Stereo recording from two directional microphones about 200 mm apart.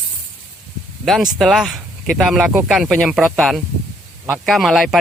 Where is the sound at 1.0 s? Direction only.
Centre (ahead or behind).